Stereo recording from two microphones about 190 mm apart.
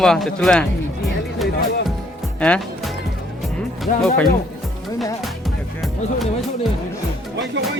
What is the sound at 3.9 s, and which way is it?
Speech, 40° left (ahead or behind).